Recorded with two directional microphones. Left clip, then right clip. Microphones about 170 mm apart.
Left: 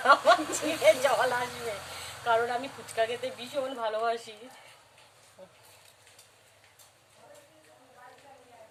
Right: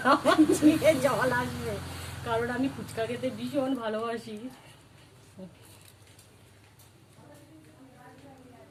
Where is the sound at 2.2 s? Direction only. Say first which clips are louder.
Left 3 dB; 20° left (ahead or behind).